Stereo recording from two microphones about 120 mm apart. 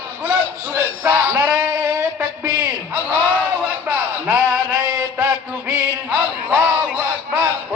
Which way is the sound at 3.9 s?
20° right (ahead or behind).